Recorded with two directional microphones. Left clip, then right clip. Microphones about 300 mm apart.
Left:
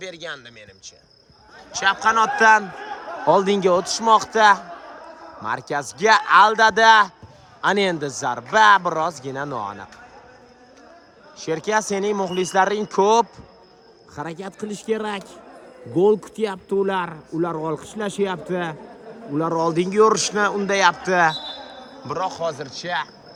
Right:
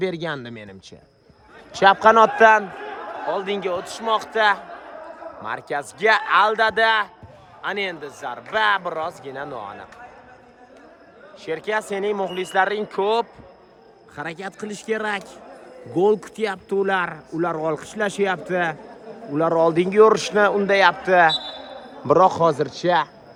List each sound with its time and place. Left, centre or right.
0.0 s a man's voice: centre
3.2 s speech: centre
11.3 s speech: centre
14.2 s speech: centre
22.0 s a man's voice: centre